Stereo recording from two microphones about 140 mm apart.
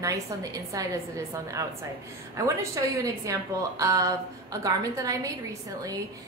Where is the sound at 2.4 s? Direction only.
20° right (ahead or behind).